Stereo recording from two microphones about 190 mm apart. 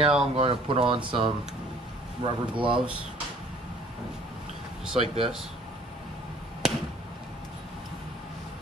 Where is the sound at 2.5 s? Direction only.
25° right (ahead or behind).